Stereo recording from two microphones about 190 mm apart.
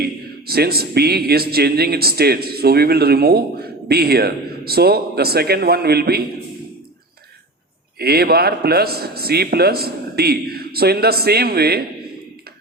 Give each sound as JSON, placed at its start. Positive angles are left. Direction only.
{"t": 0.0, "sound": "speech", "side_deg": -55}
{"t": 7.9, "sound": "speech", "side_deg": -55}